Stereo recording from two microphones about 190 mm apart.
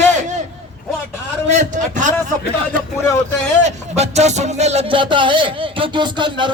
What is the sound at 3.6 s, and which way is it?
Music, 35° right (ahead or behind).